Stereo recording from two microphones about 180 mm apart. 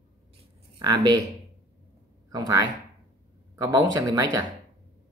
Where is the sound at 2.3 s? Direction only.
20° right (ahead or behind).